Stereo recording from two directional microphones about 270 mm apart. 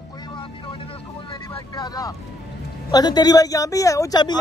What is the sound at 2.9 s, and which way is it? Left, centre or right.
A woman's voice, centre.